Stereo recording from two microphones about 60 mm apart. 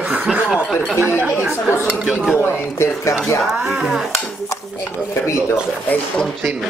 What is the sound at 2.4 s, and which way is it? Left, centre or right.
Speech, left.